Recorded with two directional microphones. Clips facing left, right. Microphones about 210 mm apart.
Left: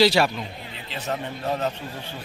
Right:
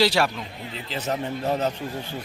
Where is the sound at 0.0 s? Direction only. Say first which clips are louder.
Left 2 dB; 10° left (ahead or behind).